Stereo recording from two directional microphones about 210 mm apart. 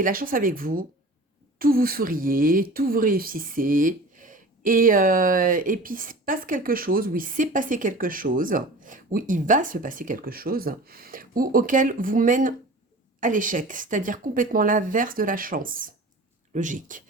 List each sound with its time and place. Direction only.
0.0 s speech: 45° right (ahead or behind)